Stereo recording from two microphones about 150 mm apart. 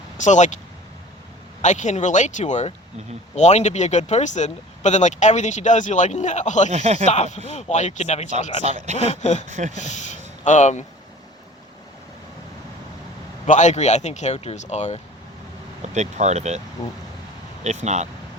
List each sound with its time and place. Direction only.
0.2 s speech: 55° left (ahead or behind)
1.6 s speech: 55° left (ahead or behind)
6.7 s speech: 45° right (ahead or behind)
7.0 s speech: 50° left (ahead or behind)
8.6 s speech: 50° right (ahead or behind)
9.0 s speech: 50° left (ahead or behind)
9.5 s speech: 55° right (ahead or behind)
9.8 s speech: 50° left (ahead or behind)
13.5 s speech: 50° left (ahead or behind)
16.0 s speech: 50° right (ahead or behind)
16.8 s speech: 25° left (ahead or behind)
17.6 s speech: 50° right (ahead or behind)